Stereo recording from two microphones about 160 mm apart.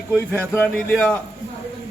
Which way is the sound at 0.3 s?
10° left (ahead or behind).